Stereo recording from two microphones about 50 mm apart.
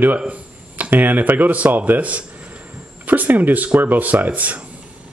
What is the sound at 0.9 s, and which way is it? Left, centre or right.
Speech, right.